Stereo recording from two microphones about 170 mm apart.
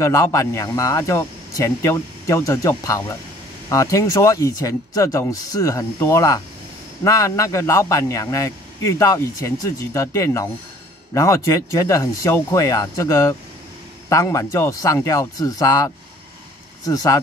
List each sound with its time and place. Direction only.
0.0 s a man's voice: 15° left (ahead or behind)